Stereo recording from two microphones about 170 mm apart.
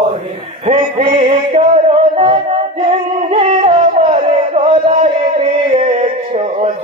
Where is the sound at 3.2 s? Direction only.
40° right (ahead or behind).